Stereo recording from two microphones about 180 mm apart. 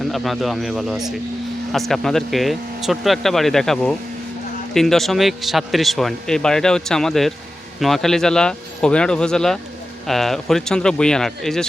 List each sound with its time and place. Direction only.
0.0 s a man's voice: centre (ahead or behind)